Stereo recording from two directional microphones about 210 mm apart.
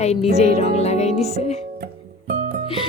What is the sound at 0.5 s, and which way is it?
Music, 30° left (ahead or behind).